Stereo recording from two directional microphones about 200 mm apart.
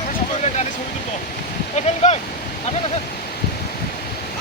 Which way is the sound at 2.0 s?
40° left (ahead or behind).